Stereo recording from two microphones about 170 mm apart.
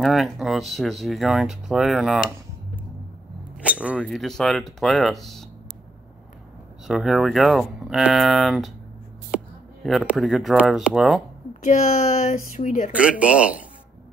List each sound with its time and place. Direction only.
0.0 s speech: centre (ahead or behind)
3.6 s speech: 5° right (ahead or behind)
6.9 s speech: centre (ahead or behind)
9.8 s speech: centre (ahead or behind)
11.6 s speech: 40° left (ahead or behind)
12.9 s speech: 5° right (ahead or behind)